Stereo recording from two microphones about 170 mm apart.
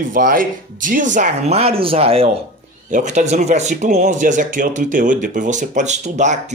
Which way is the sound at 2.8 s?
45° right (ahead or behind).